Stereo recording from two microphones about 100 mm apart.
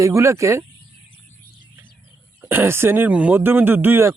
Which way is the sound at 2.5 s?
25° right (ahead or behind).